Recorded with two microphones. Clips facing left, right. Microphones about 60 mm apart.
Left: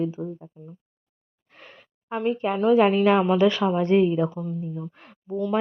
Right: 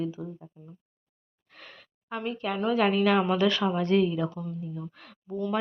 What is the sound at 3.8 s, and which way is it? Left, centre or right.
Speech, left.